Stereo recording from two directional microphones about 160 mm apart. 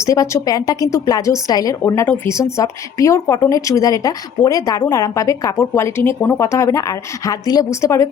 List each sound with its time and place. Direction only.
0.0 s a woman's voice: 20° left (ahead or behind)